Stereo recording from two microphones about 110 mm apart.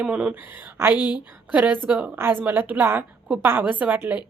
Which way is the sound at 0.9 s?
40° left (ahead or behind).